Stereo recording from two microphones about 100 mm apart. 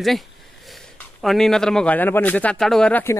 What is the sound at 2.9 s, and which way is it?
Speech, 25° left (ahead or behind).